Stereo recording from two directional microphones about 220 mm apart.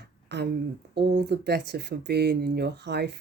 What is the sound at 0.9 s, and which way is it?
Speech, 50° right (ahead or behind).